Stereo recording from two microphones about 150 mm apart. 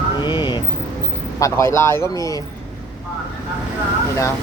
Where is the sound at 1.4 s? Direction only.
20° left (ahead or behind).